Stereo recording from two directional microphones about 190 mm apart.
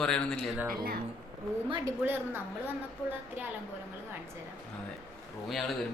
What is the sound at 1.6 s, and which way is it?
Speech, 25° right (ahead or behind).